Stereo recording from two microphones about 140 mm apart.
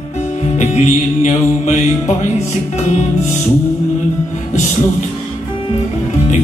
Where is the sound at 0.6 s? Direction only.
50° left (ahead or behind).